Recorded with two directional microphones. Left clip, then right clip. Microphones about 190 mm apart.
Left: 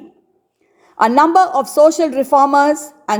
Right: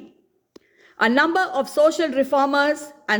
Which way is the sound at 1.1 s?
15° left (ahead or behind).